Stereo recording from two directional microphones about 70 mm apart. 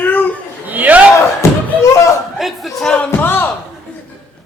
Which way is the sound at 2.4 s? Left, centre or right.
Centre.